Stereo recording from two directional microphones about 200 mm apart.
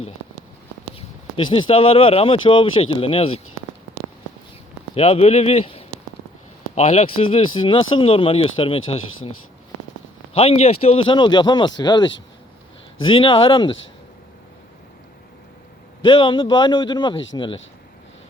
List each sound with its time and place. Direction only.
0.9 s speech: 25° left (ahead or behind)
4.9 s speech: 30° left (ahead or behind)
10.3 s speech: 30° left (ahead or behind)
16.0 s speech: 25° left (ahead or behind)